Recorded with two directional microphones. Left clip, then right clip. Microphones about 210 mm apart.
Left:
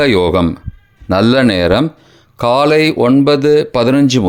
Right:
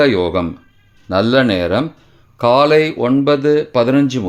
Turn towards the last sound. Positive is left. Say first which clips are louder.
# left 2 dB
turn(degrees=30)  # may be behind; listen again after turning